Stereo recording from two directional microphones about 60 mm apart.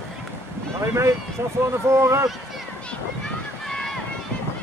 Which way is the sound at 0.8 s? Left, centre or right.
Right.